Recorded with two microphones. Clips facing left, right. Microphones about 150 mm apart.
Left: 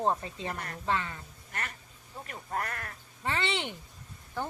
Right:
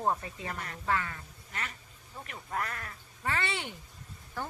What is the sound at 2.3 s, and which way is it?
Speech, 40° left (ahead or behind).